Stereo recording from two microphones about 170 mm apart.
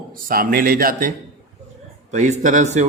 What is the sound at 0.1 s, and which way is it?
Speech, 60° right (ahead or behind).